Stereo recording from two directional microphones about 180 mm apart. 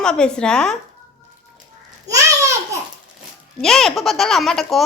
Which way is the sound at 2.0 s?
20° right (ahead or behind).